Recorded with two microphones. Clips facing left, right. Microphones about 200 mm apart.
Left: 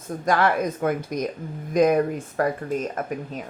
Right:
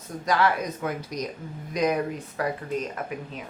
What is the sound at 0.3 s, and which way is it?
Speech, 50° left (ahead or behind).